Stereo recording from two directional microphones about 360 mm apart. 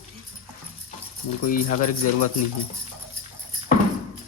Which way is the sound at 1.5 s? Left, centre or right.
Left.